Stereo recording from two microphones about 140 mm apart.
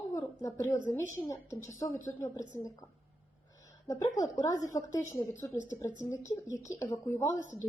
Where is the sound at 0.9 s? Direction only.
20° left (ahead or behind).